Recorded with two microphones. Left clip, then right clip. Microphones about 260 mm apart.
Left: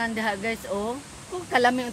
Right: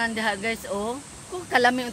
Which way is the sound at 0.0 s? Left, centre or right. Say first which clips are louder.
Right 1 dB; centre.